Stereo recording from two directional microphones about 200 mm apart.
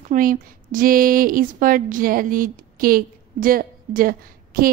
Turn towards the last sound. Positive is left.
turn(degrees=-45)  # may be behind; listen again after turning